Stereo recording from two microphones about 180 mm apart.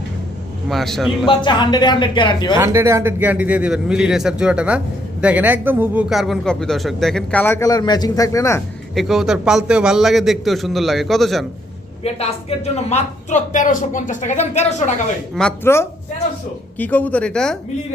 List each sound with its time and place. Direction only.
0.7 s a man's voice: centre (ahead or behind)
1.2 s speech: 25° left (ahead or behind)
2.6 s a man's voice: 15° right (ahead or behind); by 8.6 s 15° left (ahead or behind)
9.0 s a man's voice: centre (ahead or behind)
12.0 s a woman's voice: 35° left (ahead or behind)
15.4 s a woman's voice: 10° left (ahead or behind)